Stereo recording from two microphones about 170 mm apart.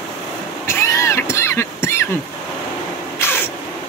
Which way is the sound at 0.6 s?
15° left (ahead or behind).